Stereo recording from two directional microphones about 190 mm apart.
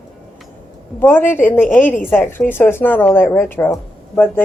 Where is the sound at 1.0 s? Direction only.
10° left (ahead or behind).